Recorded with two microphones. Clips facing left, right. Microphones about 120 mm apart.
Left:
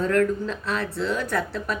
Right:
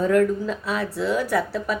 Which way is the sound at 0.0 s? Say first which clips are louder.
Right 2 dB; 10° right (ahead or behind).